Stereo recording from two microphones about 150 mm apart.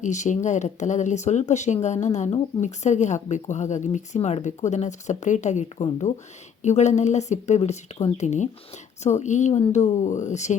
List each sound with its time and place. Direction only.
0.0 s speech: 55° left (ahead or behind)